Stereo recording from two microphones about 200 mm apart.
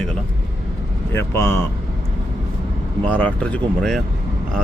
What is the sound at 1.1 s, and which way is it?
Speech, 10° left (ahead or behind).